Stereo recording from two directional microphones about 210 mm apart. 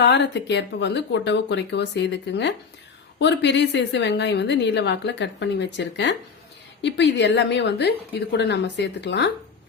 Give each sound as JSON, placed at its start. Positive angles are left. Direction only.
{"t": 0.0, "sound": "a woman's voice", "side_deg": 55}